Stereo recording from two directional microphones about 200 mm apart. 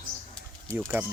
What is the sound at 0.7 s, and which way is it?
Speech, 10° right (ahead or behind).